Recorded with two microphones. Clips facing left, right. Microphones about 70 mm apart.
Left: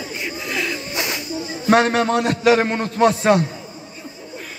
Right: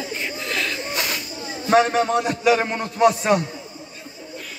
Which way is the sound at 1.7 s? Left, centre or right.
Left.